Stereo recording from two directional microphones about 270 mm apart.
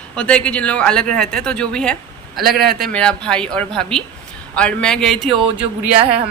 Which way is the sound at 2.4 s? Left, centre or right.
Right.